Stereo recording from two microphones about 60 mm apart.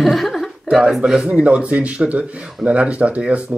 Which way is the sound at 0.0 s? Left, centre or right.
Centre.